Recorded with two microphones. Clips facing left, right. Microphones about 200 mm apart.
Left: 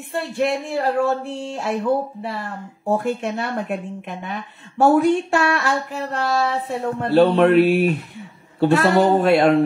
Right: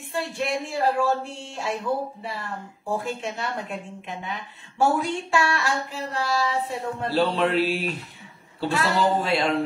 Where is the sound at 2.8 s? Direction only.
60° left (ahead or behind).